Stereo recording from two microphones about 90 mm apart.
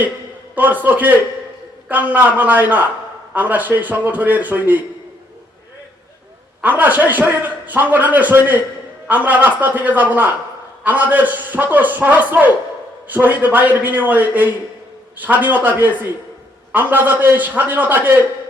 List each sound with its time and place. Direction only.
0.5 s a man's voice: 20° right (ahead or behind)
6.6 s a man's voice: 20° right (ahead or behind)